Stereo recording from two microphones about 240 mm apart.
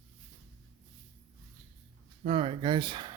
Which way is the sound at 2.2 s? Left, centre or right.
Right.